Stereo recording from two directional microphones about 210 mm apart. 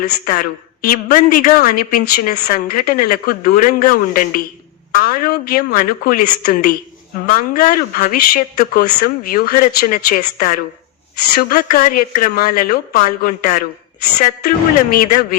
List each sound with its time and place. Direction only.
0.0 s a woman's voice: 40° left (ahead or behind)